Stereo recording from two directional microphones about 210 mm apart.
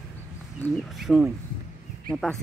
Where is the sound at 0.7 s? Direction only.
Centre (ahead or behind).